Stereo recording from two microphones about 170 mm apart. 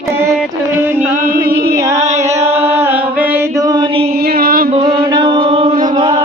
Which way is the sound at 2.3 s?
35° right (ahead or behind).